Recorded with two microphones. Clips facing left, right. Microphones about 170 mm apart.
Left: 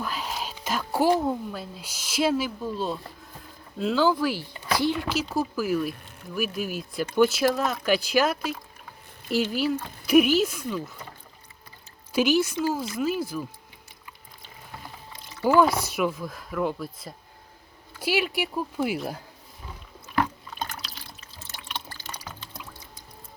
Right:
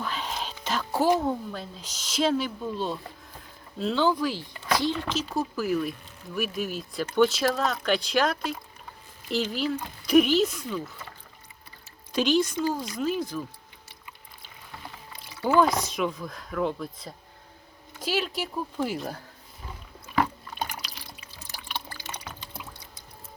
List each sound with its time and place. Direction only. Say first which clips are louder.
0.0 s a sound: left 1 dB; 5° left (ahead or behind)
1.2 s speech: left 1 dB; 10° left (ahead or behind)
12.1 s speech: left 1 dB; 5° left (ahead or behind)
15.4 s speech: left 2 dB; 5° left (ahead or behind)
20.1 s water: even; 10° right (ahead or behind)